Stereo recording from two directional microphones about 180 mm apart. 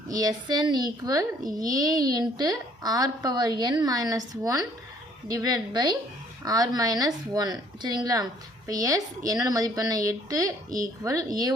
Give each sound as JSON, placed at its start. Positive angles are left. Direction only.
{"t": 0.1, "sound": "a woman's voice", "side_deg": -20}